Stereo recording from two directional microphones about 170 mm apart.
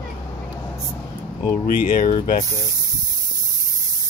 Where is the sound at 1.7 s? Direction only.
55° left (ahead or behind).